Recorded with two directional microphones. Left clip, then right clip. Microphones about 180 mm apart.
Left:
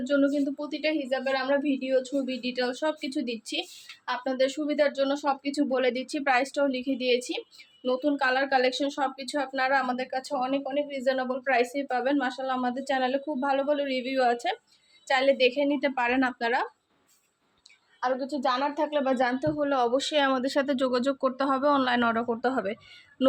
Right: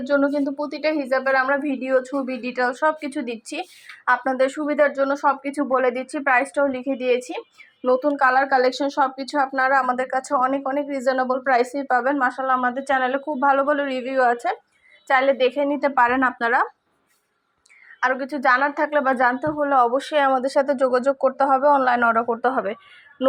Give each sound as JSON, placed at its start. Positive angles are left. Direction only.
{"t": 0.0, "sound": "speech", "side_deg": 15}
{"t": 4.0, "sound": "speech", "side_deg": 5}
{"t": 14.0, "sound": "speech", "side_deg": 20}
{"t": 15.1, "sound": "speech", "side_deg": 5}
{"t": 18.0, "sound": "a woman's voice", "side_deg": -15}
{"t": 18.9, "sound": "speech", "side_deg": 0}
{"t": 19.5, "sound": "speech", "side_deg": 15}